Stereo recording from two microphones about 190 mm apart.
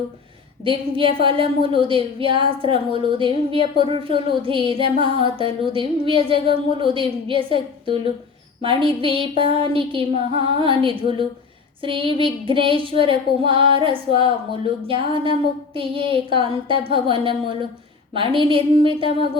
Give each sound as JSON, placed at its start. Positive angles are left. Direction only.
{"t": 0.6, "sound": "a woman's voice", "side_deg": -25}